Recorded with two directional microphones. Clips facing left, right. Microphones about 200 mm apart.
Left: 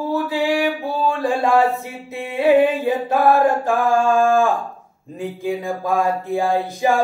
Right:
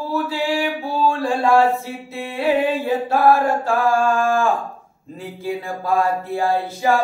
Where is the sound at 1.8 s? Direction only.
20° left (ahead or behind).